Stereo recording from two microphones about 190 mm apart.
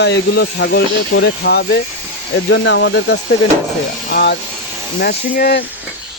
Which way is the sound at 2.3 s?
75° left (ahead or behind).